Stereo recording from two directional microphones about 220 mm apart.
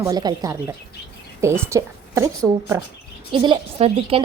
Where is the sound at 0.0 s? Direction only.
15° right (ahead or behind).